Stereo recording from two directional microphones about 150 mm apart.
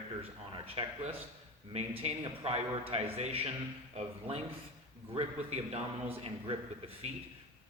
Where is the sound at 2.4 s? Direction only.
45° right (ahead or behind).